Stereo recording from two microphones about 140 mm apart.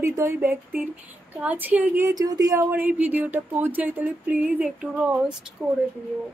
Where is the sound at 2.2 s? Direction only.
25° right (ahead or behind); by 5.5 s 5° right (ahead or behind).